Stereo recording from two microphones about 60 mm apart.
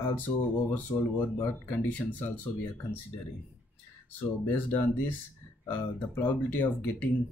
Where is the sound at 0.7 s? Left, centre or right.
Left.